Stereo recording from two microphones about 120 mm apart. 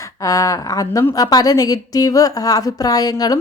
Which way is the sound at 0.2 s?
30° left (ahead or behind).